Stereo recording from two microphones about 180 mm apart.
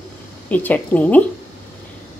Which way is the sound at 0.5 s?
10° left (ahead or behind).